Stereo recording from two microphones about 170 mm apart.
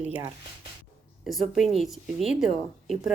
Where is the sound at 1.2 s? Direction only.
Centre (ahead or behind).